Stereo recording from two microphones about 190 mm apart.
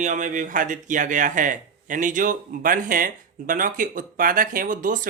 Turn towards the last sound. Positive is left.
turn(degrees=-45)  # may be behind; listen again after turning